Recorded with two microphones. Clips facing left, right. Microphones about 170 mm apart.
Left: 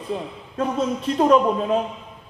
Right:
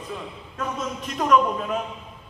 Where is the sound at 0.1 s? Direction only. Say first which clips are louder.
Left 10 dB; 30° left (ahead or behind).